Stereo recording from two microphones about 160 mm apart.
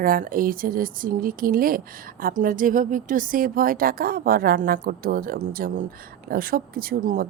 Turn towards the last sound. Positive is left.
turn(degrees=-60)  # may be behind; listen again after turning